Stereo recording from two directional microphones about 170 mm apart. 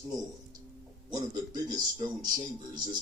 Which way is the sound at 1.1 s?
20° right (ahead or behind).